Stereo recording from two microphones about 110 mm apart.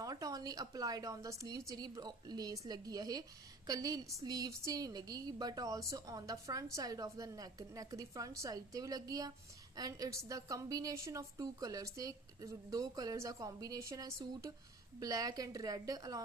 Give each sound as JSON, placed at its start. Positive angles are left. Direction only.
{"t": 0.0, "sound": "a woman's voice", "side_deg": -35}